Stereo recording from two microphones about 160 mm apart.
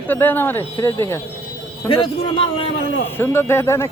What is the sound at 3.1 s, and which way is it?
Speech, 15° left (ahead or behind).